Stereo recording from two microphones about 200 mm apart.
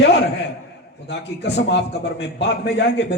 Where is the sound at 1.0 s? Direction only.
60° left (ahead or behind).